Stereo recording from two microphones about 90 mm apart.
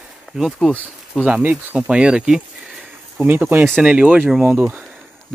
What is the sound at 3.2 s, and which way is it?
Speech, 20° right (ahead or behind).